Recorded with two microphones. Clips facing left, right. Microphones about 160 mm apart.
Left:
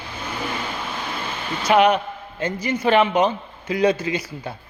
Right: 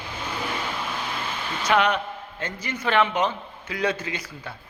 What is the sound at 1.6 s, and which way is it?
A man's voice, 15° left (ahead or behind).